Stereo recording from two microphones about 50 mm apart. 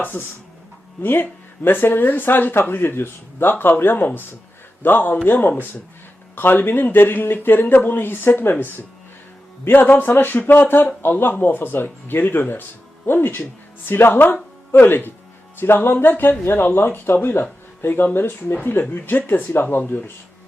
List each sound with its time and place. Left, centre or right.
1.0 s speech: left